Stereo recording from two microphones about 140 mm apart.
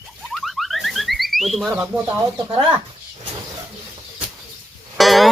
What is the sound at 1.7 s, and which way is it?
Speech, 20° right (ahead or behind).